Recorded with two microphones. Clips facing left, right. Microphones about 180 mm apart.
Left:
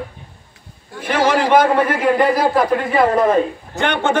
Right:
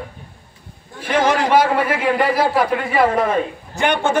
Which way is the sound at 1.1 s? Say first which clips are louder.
Left 1 dB; 5° left (ahead or behind).